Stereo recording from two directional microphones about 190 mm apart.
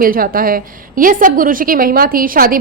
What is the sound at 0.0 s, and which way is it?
A woman's voice, 50° right (ahead or behind).